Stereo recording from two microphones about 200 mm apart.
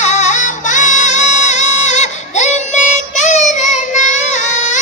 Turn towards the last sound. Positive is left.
turn(degrees=35)  # may be behind; listen again after turning